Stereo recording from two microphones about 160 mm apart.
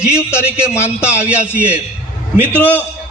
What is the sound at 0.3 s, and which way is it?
Speech, 15° left (ahead or behind).